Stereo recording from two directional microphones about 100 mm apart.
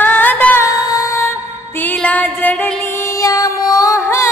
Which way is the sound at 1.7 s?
20° left (ahead or behind).